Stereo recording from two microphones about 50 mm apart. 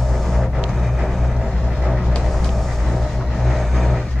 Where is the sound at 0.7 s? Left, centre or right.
Centre.